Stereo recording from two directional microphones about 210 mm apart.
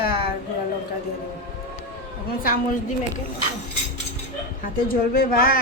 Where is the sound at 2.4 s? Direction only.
45° left (ahead or behind).